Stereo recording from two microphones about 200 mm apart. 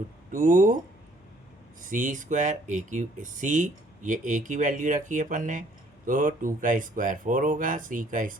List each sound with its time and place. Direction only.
0.3 s speech: 40° right (ahead or behind)
1.8 s speech: 40° right (ahead or behind)